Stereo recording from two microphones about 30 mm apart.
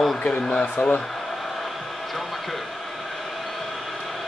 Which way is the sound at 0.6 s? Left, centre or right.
Left.